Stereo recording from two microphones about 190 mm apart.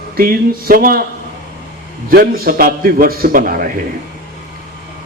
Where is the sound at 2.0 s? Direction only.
50° right (ahead or behind).